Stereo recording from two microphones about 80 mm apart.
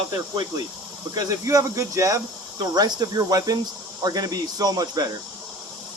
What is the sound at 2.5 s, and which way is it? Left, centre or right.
Speech, right.